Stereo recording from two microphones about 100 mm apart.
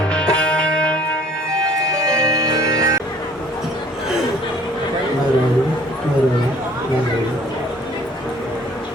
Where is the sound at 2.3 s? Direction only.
35° right (ahead or behind).